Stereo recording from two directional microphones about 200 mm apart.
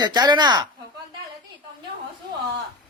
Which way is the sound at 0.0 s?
20° right (ahead or behind).